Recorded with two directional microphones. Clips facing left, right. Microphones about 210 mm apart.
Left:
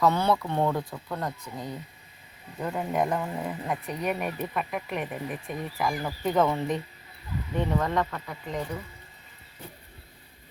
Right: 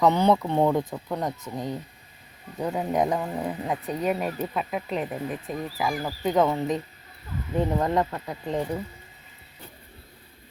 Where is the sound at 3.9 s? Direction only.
30° right (ahead or behind).